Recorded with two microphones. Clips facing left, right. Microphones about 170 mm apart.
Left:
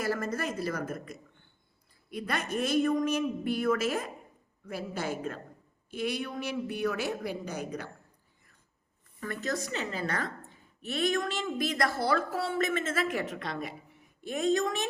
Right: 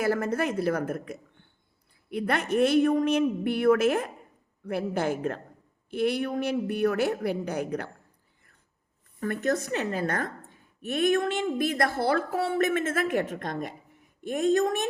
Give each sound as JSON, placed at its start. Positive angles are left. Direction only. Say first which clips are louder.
{"t": 0.0, "sound": "speech", "louder": "right 5 dB", "side_deg": -60}
{"t": 9.2, "sound": "a woman's voice", "louder": "right 7 dB", "side_deg": -60}